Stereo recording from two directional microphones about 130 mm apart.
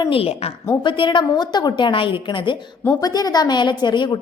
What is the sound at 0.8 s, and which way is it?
A woman's voice, 40° left (ahead or behind).